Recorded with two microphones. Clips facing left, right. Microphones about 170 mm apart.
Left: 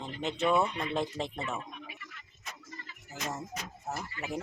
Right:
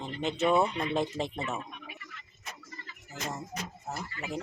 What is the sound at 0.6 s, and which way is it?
Speech, 25° right (ahead or behind).